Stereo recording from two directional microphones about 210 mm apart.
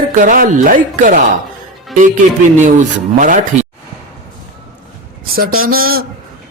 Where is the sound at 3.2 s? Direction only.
35° right (ahead or behind).